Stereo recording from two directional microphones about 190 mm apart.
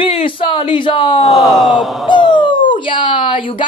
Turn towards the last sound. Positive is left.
turn(degrees=25)  # may be behind; listen again after turning